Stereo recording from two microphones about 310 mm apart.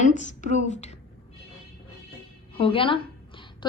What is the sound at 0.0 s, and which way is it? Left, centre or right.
Speech, left.